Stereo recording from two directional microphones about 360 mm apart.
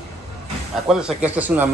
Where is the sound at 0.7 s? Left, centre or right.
Centre.